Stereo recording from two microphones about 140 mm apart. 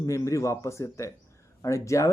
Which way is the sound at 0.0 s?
20° left (ahead or behind).